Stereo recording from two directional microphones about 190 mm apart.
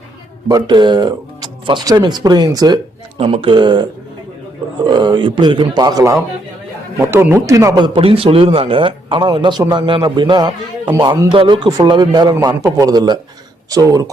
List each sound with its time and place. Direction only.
0.4 s speech: 25° right (ahead or behind)
4.9 s a man's voice: 20° right (ahead or behind)
7.9 s a man's voice: 30° right (ahead or behind)